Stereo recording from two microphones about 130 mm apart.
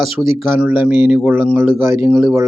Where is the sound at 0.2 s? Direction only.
5° right (ahead or behind).